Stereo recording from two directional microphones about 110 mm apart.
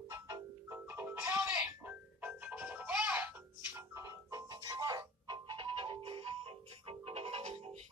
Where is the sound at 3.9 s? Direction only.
30° right (ahead or behind); by 7.7 s 65° right (ahead or behind).